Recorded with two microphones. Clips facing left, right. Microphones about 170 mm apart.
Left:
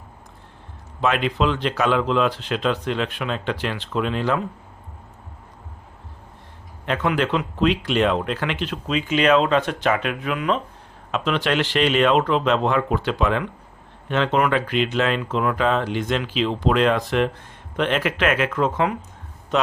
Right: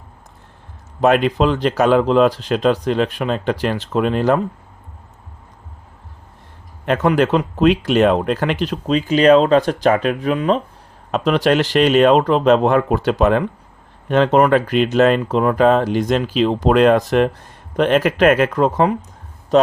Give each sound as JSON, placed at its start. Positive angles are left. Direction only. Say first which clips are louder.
{"t": 1.0, "sound": "speech", "louder": "right 6 dB", "side_deg": -45}
{"t": 6.8, "sound": "speech", "louder": "right 6 dB", "side_deg": -45}